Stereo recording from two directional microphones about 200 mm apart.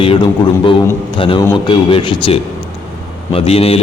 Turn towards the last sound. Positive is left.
turn(degrees=30)  # may be behind; listen again after turning